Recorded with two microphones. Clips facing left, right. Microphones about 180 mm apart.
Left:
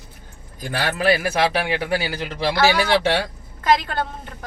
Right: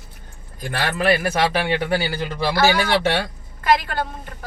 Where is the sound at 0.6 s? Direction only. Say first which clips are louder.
Even; 10° left (ahead or behind).